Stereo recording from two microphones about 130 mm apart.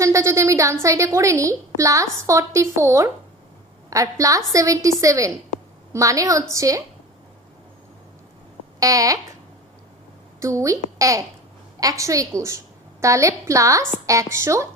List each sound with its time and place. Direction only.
0.0 s a woman's voice: 25° right (ahead or behind)
8.8 s a woman's voice: 25° right (ahead or behind)
10.4 s a woman's voice: 25° right (ahead or behind)